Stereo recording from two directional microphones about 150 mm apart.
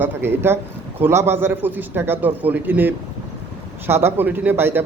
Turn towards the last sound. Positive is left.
turn(degrees=-15)  # may be behind; listen again after turning